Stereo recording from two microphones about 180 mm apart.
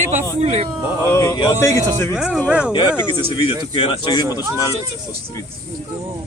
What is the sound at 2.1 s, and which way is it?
Speech, 5° right (ahead or behind).